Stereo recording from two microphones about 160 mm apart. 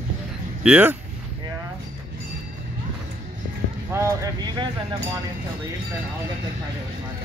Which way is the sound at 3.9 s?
20° right (ahead or behind).